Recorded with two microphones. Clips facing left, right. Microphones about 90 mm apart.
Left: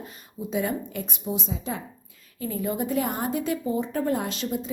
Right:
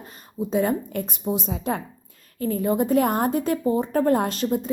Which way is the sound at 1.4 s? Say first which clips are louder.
Right 5 dB; 60° right (ahead or behind).